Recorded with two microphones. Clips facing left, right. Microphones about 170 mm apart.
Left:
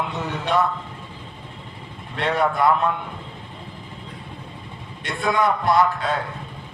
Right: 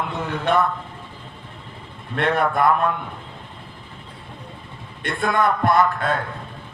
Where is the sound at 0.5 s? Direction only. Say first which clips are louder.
Right 2 dB; 55° right (ahead or behind).